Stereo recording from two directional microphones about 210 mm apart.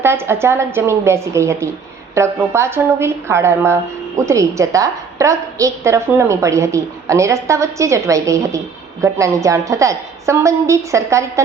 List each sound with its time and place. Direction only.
0.0 s a woman's voice: 10° right (ahead or behind)